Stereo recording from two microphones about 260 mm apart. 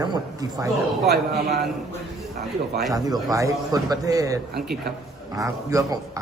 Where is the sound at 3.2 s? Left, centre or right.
Centre.